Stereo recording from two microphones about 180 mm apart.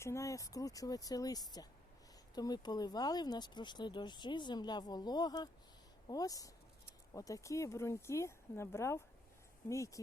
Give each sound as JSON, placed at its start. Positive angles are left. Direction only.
{"t": 0.0, "sound": "speech", "side_deg": 15}